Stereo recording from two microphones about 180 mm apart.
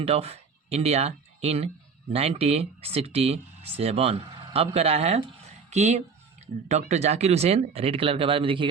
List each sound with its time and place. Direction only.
0.0 s speech: 35° right (ahead or behind)